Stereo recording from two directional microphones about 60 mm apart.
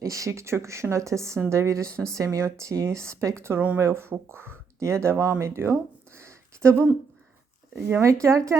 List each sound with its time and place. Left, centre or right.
0.0 s speech: right
4.8 s speech: right
5.4 s a sound: right
7.8 s speech: right
8.0 s speech: right